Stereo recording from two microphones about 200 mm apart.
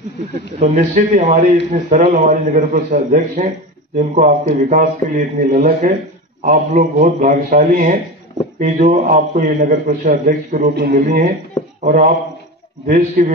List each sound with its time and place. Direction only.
0.6 s a man's voice: 40° right (ahead or behind)
10.7 s a man's voice: 50° right (ahead or behind)